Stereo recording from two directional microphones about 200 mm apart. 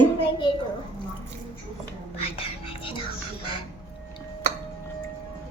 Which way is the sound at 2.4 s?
25° left (ahead or behind).